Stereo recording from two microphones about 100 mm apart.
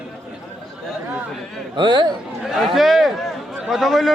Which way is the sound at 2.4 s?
5° right (ahead or behind).